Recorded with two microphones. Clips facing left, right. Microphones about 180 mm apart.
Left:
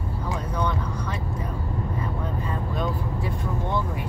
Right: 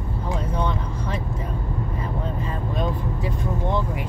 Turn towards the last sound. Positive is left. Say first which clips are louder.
# right 2 dB
turn(degrees=-20)  # may be behind; listen again after turning